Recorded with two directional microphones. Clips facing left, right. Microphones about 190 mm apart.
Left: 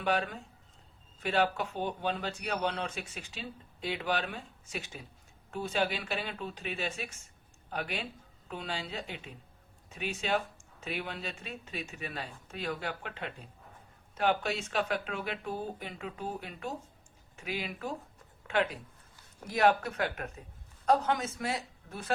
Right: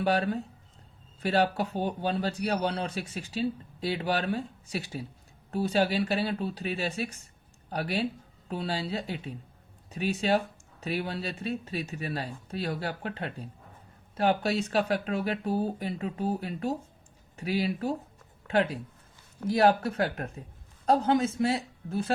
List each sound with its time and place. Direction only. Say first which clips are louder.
0.0 s a woman's voice: right 5 dB; 35° right (ahead or behind)